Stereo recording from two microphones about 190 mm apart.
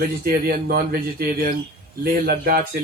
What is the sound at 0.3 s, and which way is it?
Speech, 50° right (ahead or behind).